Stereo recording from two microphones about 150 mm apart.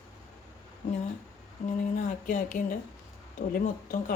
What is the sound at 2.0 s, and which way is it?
A woman's voice, 60° left (ahead or behind).